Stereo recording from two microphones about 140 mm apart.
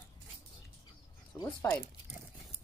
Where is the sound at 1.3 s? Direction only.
20° left (ahead or behind).